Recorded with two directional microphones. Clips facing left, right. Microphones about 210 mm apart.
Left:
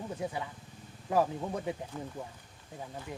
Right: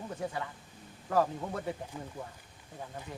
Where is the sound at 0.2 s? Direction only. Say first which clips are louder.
Even; 15° left (ahead or behind).